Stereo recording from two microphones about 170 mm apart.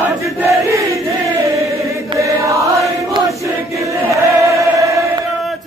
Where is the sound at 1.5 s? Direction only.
20° right (ahead or behind).